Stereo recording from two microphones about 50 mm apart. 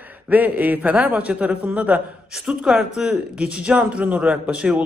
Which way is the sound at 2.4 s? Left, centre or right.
Centre.